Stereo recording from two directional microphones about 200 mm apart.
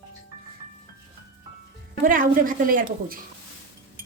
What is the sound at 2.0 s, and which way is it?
A woman's voice, 45° right (ahead or behind).